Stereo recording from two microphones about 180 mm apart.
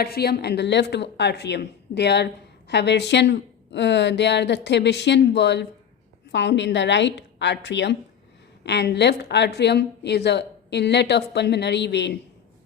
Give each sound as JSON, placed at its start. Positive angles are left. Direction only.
{"t": 0.0, "sound": "speech", "side_deg": 60}